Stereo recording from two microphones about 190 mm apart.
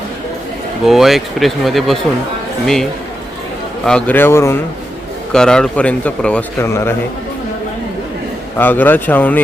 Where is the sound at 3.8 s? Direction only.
5° left (ahead or behind).